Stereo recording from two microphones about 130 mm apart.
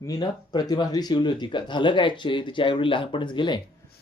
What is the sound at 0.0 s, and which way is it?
Speech, 30° left (ahead or behind).